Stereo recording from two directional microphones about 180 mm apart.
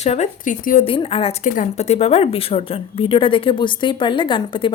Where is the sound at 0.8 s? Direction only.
30° left (ahead or behind).